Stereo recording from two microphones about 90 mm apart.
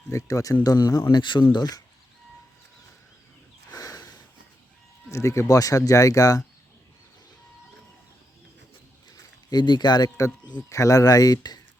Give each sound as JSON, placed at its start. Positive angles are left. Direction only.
{"t": 0.1, "sound": "speech", "side_deg": 35}
{"t": 1.2, "sound": "speech", "side_deg": 60}
{"t": 1.5, "sound": "speech", "side_deg": 50}
{"t": 3.7, "sound": "a sound", "side_deg": 40}
{"t": 5.1, "sound": "speech", "side_deg": 35}
{"t": 9.0, "sound": "a sound", "side_deg": 55}
{"t": 10.7, "sound": "speech", "side_deg": 35}